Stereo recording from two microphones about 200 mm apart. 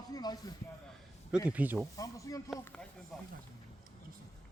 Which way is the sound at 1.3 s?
5° right (ahead or behind).